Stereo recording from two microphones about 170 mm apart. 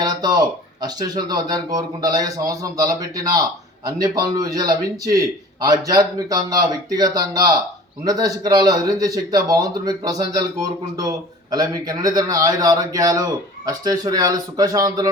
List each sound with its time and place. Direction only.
0.0 s speech: 25° right (ahead or behind)